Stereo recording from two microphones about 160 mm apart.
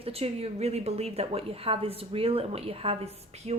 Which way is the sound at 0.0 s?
40° right (ahead or behind).